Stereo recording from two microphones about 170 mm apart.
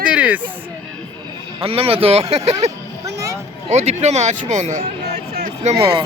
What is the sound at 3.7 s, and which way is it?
Speech, 40° right (ahead or behind).